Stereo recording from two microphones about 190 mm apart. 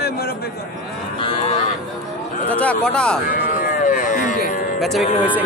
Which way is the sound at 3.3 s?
50° left (ahead or behind).